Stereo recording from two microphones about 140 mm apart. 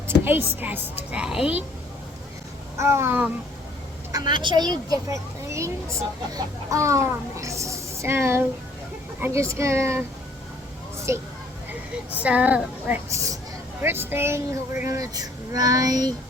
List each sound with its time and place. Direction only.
0.3 s a woman's voice: 15° right (ahead or behind)
2.7 s a woman's voice: 20° right (ahead or behind)
4.1 s a child's voice: 30° right (ahead or behind)
11.1 s speech: 20° right (ahead or behind)
12.1 s a woman's voice: 10° right (ahead or behind)
13.1 s a woman's voice: 25° right (ahead or behind)